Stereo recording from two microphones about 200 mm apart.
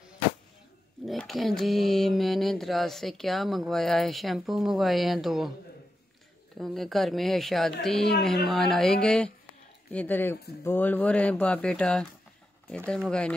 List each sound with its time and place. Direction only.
1.0 s mantra: centre (ahead or behind)
6.6 s mantra: centre (ahead or behind)
8.0 s a woman's voice: 55° left (ahead or behind)
8.5 s mantra: centre (ahead or behind)
9.8 s speech: 10° left (ahead or behind)
12.6 s mantra: 5° left (ahead or behind)